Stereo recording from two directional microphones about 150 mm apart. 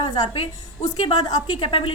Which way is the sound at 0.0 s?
30° left (ahead or behind).